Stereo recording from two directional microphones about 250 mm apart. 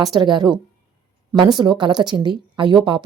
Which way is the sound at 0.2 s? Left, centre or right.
Centre.